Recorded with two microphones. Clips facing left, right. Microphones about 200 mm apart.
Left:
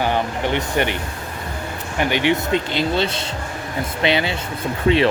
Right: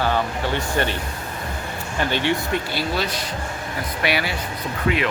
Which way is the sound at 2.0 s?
15° left (ahead or behind).